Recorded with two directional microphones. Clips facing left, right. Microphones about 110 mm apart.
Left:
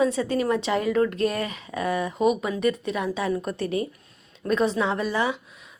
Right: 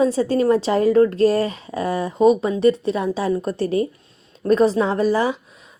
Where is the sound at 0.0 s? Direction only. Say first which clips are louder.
Right 5 dB; 35° right (ahead or behind).